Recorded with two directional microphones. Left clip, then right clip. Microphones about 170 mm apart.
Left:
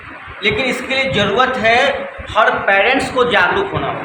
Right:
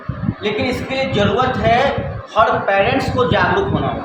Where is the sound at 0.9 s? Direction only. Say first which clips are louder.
Left 2 dB; 15° left (ahead or behind).